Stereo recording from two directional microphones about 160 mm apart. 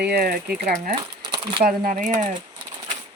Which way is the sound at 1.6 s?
60° right (ahead or behind).